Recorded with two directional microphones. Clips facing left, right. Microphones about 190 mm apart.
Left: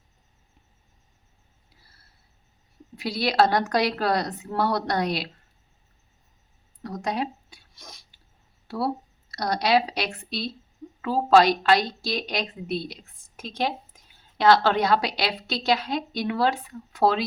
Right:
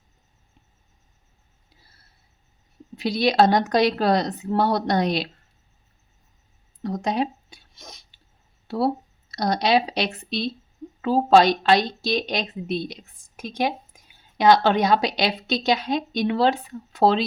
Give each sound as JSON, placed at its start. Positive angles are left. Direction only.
{"t": 2.9, "sound": "a woman's voice", "side_deg": -20}
{"t": 6.8, "sound": "a sound", "side_deg": -20}
{"t": 8.6, "sound": "a woman's voice", "side_deg": -25}